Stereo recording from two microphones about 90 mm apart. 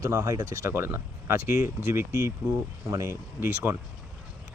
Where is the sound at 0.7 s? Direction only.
25° right (ahead or behind).